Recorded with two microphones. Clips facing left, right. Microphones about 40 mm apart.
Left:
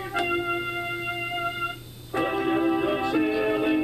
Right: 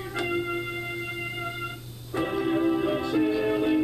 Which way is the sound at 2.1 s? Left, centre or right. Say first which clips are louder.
Left 2 dB; centre.